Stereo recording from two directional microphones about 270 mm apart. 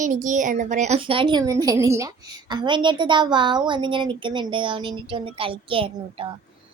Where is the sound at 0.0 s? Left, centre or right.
Right.